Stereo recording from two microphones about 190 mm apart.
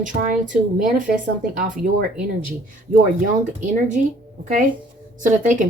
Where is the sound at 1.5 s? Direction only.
45° right (ahead or behind).